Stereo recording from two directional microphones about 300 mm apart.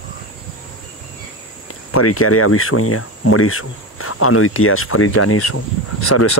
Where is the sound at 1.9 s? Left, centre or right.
Left.